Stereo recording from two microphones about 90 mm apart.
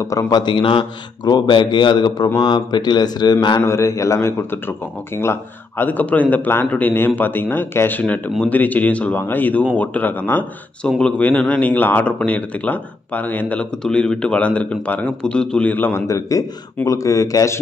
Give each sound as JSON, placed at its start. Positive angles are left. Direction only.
{"t": 0.3, "sound": "a man's voice", "side_deg": 60}
{"t": 1.2, "sound": "speech", "side_deg": 50}
{"t": 3.5, "sound": "a man's voice", "side_deg": 30}
{"t": 13.8, "sound": "a man's voice", "side_deg": 10}
{"t": 15.7, "sound": "a man's voice", "side_deg": 20}
{"t": 16.1, "sound": "speech", "side_deg": 35}